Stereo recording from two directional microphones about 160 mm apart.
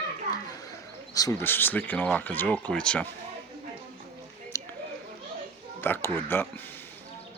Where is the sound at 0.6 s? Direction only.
20° left (ahead or behind).